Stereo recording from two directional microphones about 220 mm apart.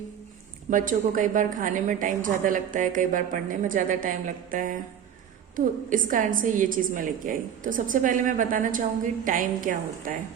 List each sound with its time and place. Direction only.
0.7 s a woman's voice: 35° right (ahead or behind)